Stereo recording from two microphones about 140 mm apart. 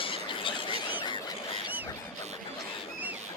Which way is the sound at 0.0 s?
40° left (ahead or behind).